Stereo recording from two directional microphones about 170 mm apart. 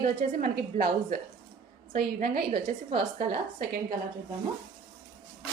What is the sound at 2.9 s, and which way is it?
Speech, 45° right (ahead or behind).